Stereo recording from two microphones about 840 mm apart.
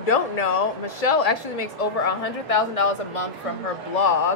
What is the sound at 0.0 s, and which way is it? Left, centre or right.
Speech, left.